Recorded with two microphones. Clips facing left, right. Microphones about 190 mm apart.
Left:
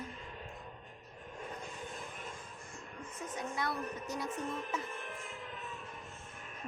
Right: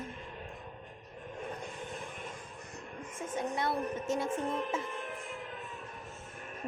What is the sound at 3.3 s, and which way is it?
Speech, 25° right (ahead or behind).